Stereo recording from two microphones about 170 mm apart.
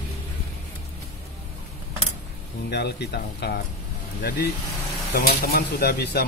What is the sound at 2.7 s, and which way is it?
Speech, 70° left (ahead or behind).